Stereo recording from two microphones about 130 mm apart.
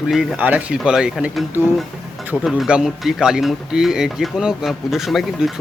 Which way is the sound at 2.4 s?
5° right (ahead or behind).